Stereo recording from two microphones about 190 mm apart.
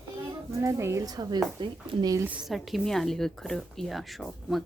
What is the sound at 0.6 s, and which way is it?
A woman's voice, 15° right (ahead or behind).